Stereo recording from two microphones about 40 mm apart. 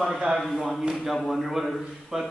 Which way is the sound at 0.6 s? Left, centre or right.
Centre.